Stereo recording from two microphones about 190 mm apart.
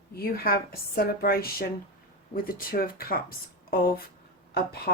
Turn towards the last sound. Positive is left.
turn(degrees=55)  # may be behind; listen again after turning